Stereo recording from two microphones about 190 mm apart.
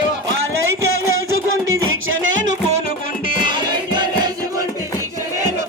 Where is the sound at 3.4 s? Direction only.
25° right (ahead or behind).